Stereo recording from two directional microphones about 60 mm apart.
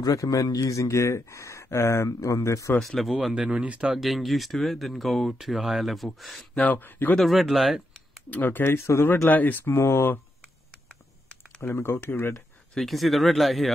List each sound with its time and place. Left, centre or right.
0.0 s speech: left
2.0 s speech: left
2.8 s speech: centre
3.3 s speech: centre
3.9 s speech: centre
6.5 s speech: left
7.2 s speech: centre
8.3 s speech: left
9.3 s speech: left
9.8 s speech: left
11.6 s speech: left
12.7 s speech: centre